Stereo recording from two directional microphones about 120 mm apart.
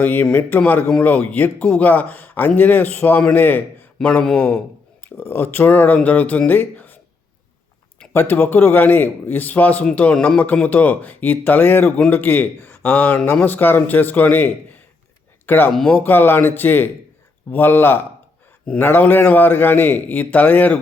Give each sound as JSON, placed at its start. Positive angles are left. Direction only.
{"t": 0.0, "sound": "a man's voice", "side_deg": 15}
{"t": 8.1, "sound": "a man's voice", "side_deg": 15}
{"t": 15.7, "sound": "speech", "side_deg": 0}
{"t": 16.0, "sound": "a man's voice", "side_deg": 15}